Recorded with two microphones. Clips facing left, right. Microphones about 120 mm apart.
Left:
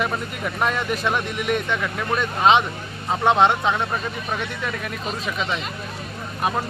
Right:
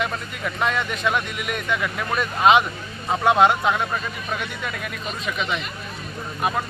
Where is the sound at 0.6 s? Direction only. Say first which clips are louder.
Left 1 dB; centre (ahead or behind).